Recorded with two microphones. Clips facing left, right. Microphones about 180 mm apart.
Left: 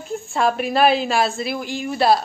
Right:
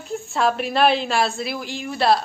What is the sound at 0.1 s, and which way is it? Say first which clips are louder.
A woman's voice: left 1 dB; centre (ahead or behind).